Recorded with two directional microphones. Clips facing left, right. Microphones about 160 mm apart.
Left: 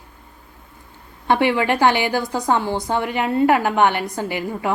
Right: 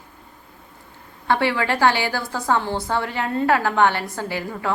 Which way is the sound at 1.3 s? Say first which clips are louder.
Left 3 dB; 20° left (ahead or behind).